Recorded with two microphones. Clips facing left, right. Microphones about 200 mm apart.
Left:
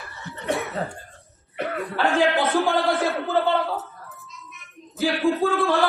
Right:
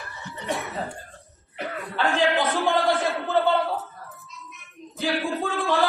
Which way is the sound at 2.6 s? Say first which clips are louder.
Left 1 dB; centre (ahead or behind).